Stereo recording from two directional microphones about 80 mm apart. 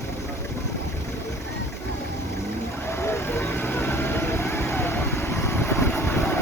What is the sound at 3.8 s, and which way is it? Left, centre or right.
Vehicle, left.